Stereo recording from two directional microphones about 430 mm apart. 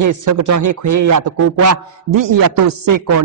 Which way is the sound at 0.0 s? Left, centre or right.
Right.